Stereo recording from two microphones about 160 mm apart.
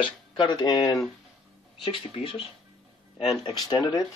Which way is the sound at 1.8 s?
35° left (ahead or behind).